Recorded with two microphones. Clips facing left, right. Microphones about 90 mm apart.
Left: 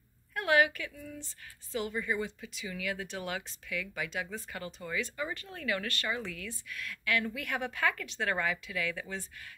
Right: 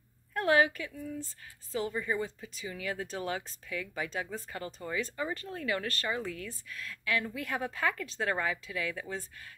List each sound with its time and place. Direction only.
0.3 s a woman's voice: 30° right (ahead or behind)